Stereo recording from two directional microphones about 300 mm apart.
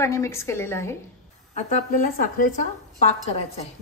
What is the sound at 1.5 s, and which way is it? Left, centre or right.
A woman's voice, left.